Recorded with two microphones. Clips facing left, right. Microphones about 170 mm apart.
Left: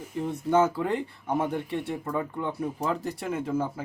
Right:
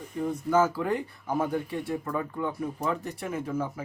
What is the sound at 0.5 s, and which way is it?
Speech, 25° left (ahead or behind).